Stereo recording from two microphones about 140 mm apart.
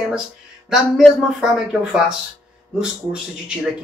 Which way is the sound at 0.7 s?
Centre (ahead or behind).